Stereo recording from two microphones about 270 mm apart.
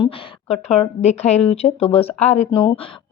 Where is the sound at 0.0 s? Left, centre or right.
Centre.